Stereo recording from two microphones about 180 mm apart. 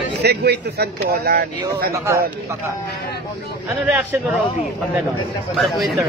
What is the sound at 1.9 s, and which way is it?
Speech, 15° right (ahead or behind).